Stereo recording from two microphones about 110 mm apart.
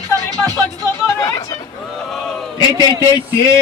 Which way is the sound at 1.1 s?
30° left (ahead or behind).